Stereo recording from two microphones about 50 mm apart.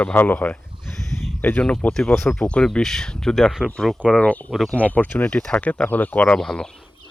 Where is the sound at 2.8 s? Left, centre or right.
Centre.